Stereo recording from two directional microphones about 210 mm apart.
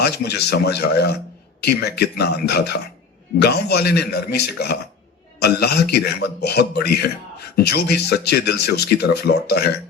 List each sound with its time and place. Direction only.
0.0 s speech: 50° left (ahead or behind)